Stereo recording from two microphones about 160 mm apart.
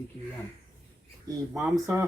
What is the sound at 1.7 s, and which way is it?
Speech, 20° right (ahead or behind).